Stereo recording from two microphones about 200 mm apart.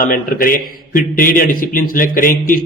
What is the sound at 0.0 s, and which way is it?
A man's voice, 45° left (ahead or behind).